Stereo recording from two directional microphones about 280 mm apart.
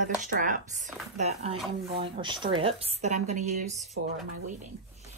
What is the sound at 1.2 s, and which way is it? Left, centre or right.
Speech, right.